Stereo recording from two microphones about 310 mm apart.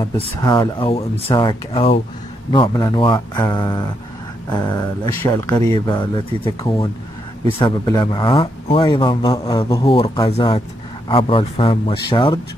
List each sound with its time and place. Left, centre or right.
0.4 s speech: centre